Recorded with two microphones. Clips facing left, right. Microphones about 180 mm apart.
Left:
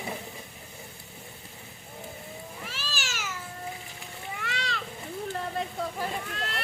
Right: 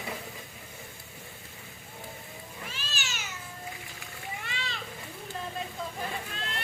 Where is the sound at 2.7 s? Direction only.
85° left.